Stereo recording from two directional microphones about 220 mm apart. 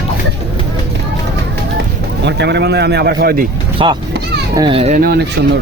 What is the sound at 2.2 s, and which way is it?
A man's voice, 50° right (ahead or behind).